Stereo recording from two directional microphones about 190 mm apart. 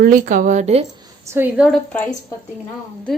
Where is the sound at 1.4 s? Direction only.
5° right (ahead or behind).